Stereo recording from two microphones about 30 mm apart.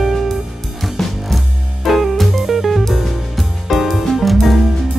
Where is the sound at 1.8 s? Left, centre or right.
Centre.